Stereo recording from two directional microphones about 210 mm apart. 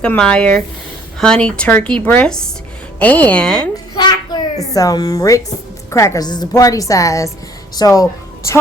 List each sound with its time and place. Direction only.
0.0 s a woman's voice: 5° left (ahead or behind)
3.9 s child singing: 20° left (ahead or behind)
4.7 s a woman's voice: 15° left (ahead or behind)